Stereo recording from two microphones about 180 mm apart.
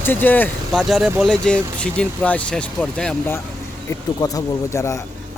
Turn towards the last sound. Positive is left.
turn(degrees=15)  # may be behind; listen again after turning